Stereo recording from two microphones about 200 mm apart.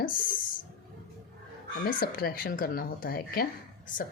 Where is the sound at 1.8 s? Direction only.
45° left (ahead or behind).